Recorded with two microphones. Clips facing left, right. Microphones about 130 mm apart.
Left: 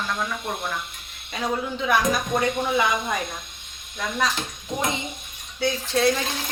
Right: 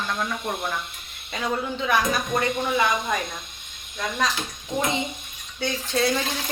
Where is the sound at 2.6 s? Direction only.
10° left (ahead or behind).